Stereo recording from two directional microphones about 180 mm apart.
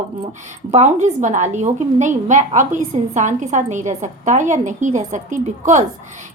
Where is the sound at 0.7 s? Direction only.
40° right (ahead or behind).